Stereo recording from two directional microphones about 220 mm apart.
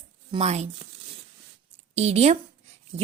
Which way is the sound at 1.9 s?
30° right (ahead or behind).